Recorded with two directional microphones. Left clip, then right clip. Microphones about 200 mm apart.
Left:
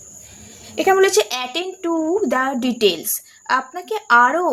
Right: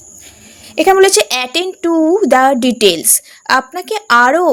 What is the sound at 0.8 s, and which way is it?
A woman's voice, 45° right (ahead or behind).